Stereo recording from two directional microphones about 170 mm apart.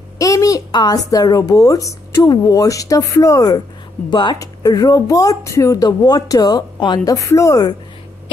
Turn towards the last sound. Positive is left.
turn(degrees=20)  # may be behind; listen again after turning